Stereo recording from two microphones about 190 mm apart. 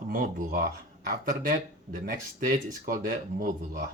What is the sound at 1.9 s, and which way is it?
Speech, 45° right (ahead or behind).